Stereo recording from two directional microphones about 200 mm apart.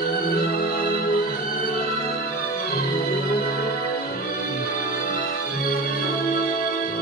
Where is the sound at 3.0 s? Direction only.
50° left (ahead or behind).